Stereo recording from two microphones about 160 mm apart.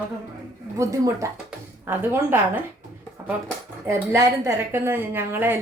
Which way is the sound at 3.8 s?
15° right (ahead or behind).